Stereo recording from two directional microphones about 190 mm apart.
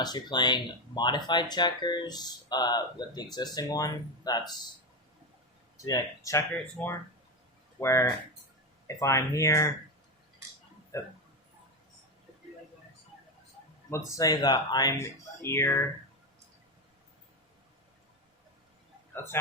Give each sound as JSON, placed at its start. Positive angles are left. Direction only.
{"t": 0.0, "sound": "speech", "side_deg": 20}
{"t": 5.7, "sound": "speech", "side_deg": 15}
{"t": 10.9, "sound": "speech", "side_deg": 15}
{"t": 13.9, "sound": "speech", "side_deg": 20}